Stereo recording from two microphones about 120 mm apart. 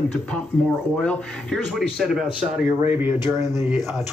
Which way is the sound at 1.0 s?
Centre (ahead or behind).